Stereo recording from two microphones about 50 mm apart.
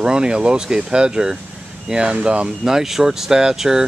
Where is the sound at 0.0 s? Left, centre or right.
Centre.